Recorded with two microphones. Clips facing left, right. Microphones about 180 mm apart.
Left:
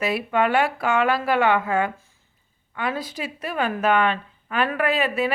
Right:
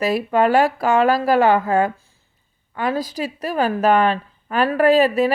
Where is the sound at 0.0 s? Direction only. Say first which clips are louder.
Right 4 dB; 40° right (ahead or behind).